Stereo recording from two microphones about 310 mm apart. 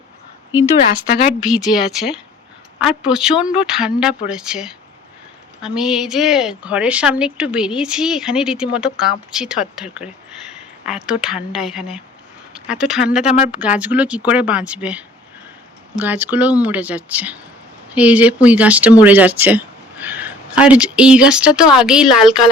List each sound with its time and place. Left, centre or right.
1.4 s a woman's voice: centre
13.2 s speech: left
13.5 s a woman's voice: centre